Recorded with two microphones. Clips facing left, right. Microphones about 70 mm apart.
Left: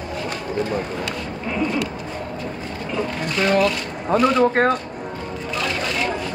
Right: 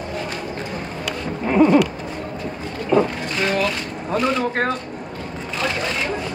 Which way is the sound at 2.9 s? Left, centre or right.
Right.